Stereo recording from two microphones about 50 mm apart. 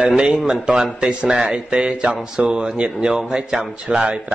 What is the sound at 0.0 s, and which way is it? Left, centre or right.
Speech, centre.